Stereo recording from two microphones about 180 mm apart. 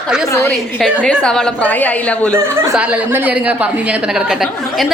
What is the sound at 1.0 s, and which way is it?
A woman's voice, 5° left (ahead or behind).